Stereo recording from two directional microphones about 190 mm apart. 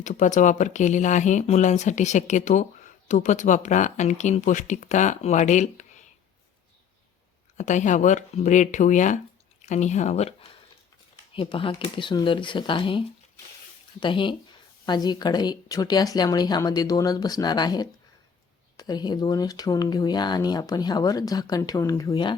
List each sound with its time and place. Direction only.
0.0 s speech: 40° left (ahead or behind)
7.5 s speech: 40° left (ahead or behind)
11.3 s speech: 25° left (ahead or behind)